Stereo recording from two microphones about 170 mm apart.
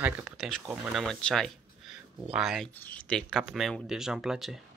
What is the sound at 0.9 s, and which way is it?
Speech, centre (ahead or behind).